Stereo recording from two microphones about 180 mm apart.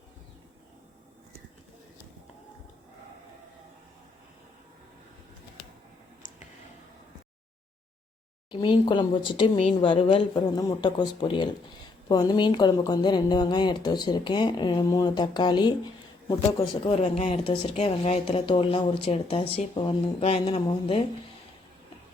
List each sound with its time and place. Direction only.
8.4 s a woman's voice: 25° left (ahead or behind)